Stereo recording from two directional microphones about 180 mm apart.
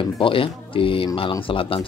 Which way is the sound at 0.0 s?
30° left (ahead or behind).